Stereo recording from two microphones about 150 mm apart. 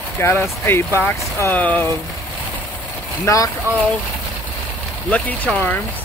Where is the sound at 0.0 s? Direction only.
15° left (ahead or behind).